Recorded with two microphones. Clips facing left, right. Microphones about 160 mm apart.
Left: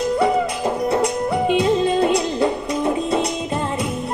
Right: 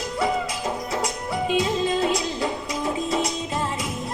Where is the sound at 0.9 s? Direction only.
60° left (ahead or behind).